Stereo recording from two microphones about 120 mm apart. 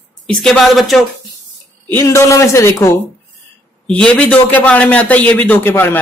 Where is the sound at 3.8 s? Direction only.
10° left (ahead or behind).